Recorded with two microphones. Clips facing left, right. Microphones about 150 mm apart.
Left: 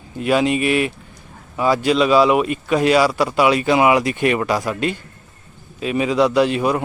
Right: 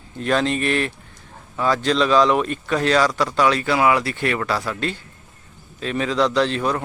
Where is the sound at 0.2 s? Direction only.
10° left (ahead or behind).